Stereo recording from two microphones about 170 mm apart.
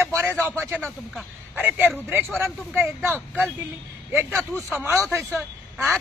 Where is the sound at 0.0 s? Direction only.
15° right (ahead or behind).